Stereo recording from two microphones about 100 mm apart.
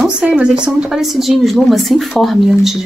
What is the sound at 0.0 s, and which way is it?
A woman's voice, 5° right (ahead or behind).